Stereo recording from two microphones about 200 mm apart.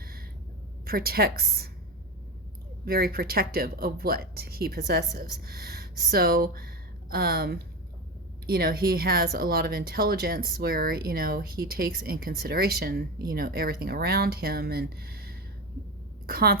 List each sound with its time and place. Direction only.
0.0 s a sound: 50° right (ahead or behind)
0.9 s speech: 50° right (ahead or behind)
2.8 s a woman's voice: 50° right (ahead or behind)